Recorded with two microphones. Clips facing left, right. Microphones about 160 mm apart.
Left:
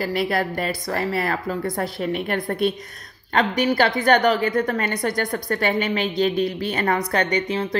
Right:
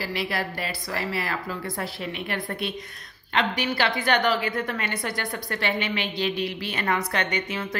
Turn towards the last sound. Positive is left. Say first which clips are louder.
# left 6 dB
turn(degrees=35)  # may be behind; listen again after turning